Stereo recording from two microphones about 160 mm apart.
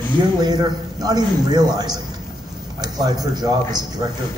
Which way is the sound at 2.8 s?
25° right (ahead or behind).